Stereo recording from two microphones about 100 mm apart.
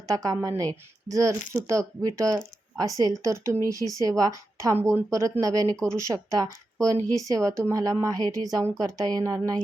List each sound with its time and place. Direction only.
0.1 s speech: 35° right (ahead or behind)